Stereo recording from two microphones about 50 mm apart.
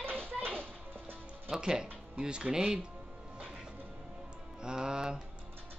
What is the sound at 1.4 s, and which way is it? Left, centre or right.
Speech, centre.